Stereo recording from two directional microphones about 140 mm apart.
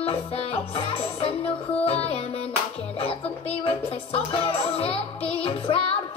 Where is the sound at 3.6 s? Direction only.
40° left (ahead or behind).